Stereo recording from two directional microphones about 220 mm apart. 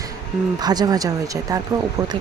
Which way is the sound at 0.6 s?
20° right (ahead or behind).